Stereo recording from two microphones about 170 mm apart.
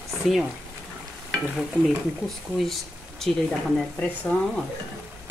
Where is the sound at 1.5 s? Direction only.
Centre (ahead or behind).